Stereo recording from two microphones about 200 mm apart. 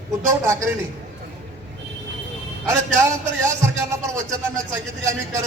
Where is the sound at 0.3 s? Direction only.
15° right (ahead or behind).